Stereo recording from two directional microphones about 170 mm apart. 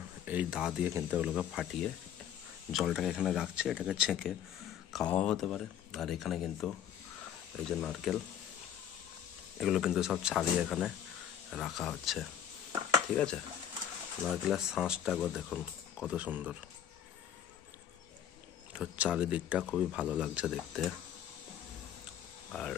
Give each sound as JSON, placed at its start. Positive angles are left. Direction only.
{"t": 0.2, "sound": "speech", "side_deg": -10}
{"t": 9.6, "sound": "speech", "side_deg": 0}
{"t": 18.7, "sound": "speech", "side_deg": -5}
{"t": 22.5, "sound": "speech", "side_deg": 5}